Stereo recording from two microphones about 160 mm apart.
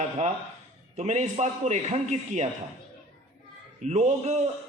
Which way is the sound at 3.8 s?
45° right (ahead or behind).